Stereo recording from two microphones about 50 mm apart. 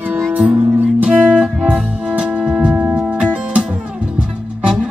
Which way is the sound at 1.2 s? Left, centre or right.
Right.